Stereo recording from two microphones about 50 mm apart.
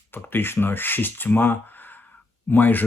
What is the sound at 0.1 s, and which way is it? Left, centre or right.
Speech, left.